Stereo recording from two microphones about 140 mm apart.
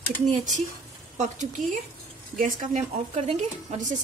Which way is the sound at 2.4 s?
70° right (ahead or behind).